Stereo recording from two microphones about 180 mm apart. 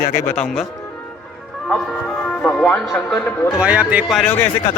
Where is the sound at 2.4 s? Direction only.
5° left (ahead or behind).